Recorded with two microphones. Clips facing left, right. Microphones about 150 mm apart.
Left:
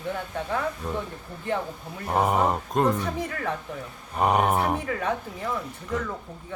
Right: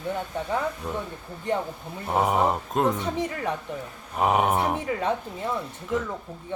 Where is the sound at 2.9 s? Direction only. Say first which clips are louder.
Right 1 dB; 20° right (ahead or behind).